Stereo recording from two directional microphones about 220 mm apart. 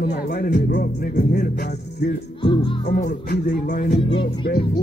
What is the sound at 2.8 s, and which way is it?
Music, 45° left (ahead or behind).